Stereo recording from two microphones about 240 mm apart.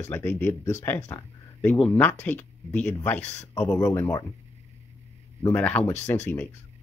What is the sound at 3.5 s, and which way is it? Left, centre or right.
Speech, centre.